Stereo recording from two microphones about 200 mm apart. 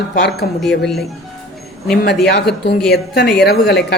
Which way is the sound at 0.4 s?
45° left (ahead or behind).